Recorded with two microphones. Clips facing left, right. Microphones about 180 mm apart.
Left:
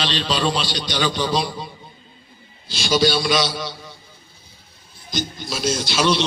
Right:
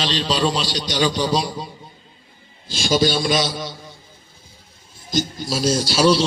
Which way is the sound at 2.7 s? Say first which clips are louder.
Even; 45° right (ahead or behind).